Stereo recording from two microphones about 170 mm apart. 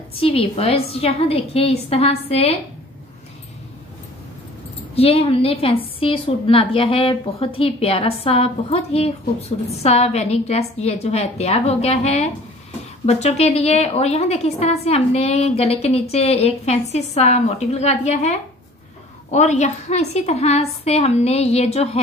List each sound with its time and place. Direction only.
0.2 s a woman's voice: 35° left (ahead or behind)
4.9 s a woman's voice: 35° left (ahead or behind)